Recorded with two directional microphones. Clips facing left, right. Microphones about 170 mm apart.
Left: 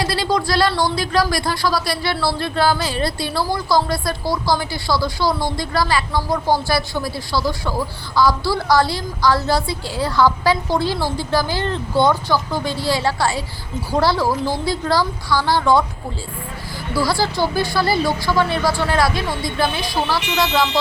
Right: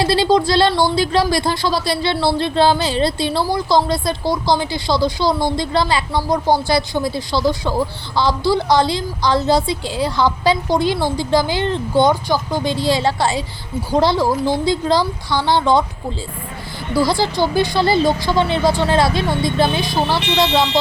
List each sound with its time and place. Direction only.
0.0 s a woman's voice: 25° right (ahead or behind)
16.9 s a woman's voice: 20° right (ahead or behind)